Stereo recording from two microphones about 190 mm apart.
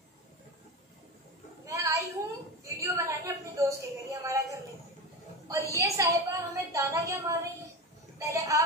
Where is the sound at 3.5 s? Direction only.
15° right (ahead or behind).